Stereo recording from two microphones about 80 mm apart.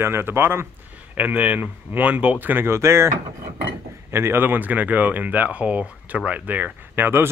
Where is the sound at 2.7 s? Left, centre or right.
Right.